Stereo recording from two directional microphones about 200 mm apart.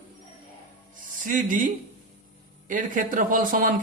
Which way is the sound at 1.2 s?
40° right (ahead or behind).